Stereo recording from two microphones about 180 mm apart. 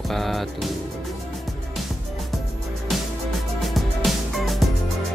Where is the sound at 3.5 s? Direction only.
Centre (ahead or behind).